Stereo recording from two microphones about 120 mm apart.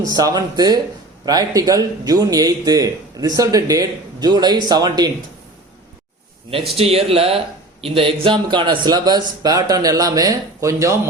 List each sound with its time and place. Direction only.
0.0 s speech: 30° right (ahead or behind)
6.7 s speech: 55° right (ahead or behind); by 10.9 s 25° right (ahead or behind)